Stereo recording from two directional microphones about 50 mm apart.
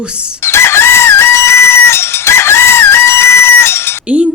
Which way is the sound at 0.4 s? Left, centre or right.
Left.